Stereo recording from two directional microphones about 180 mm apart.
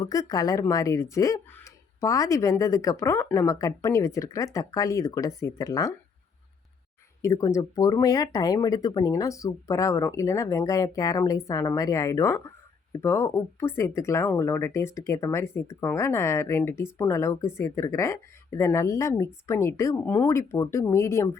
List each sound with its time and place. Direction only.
0.0 s speech: 20° left (ahead or behind)
7.2 s speech: 15° left (ahead or behind)